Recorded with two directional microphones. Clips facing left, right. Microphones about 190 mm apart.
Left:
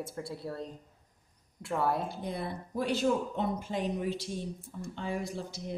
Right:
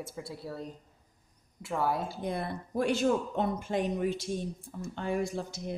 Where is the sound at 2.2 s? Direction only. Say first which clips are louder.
Right 2 dB; 50° right (ahead or behind).